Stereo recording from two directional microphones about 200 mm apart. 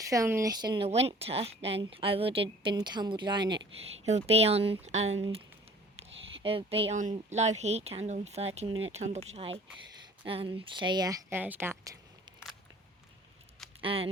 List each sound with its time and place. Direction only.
0.0 s speech: 15° right (ahead or behind); by 9.2 s 35° right (ahead or behind)
10.2 s speech: 25° right (ahead or behind)
13.8 s speech: 30° right (ahead or behind)